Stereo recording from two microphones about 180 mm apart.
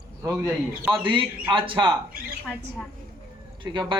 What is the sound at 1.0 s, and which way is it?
Speech, 25° right (ahead or behind).